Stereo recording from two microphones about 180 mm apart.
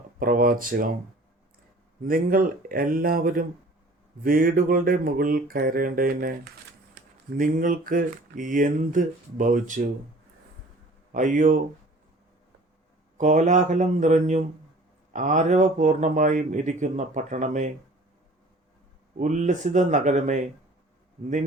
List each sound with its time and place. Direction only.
0.2 s speech: 50° right (ahead or behind)
2.0 s speech: 50° right (ahead or behind)
11.1 s speech: 45° right (ahead or behind)
13.1 s speech: 45° right (ahead or behind)
19.1 s speech: 45° right (ahead or behind)